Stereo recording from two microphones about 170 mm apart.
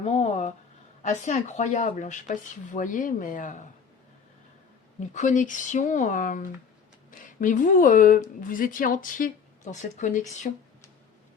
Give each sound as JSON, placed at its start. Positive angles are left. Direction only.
{"t": 0.0, "sound": "a woman's voice", "side_deg": 40}
{"t": 4.9, "sound": "a woman's voice", "side_deg": 45}